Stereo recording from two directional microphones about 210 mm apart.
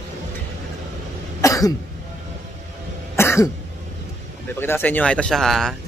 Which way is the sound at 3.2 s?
10° left (ahead or behind).